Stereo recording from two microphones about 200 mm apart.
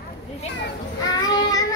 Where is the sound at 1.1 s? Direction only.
20° left (ahead or behind).